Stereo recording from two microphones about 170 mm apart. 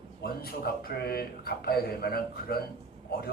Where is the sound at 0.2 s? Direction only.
65° left (ahead or behind).